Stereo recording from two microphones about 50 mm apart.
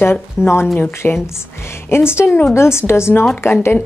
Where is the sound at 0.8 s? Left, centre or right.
Left.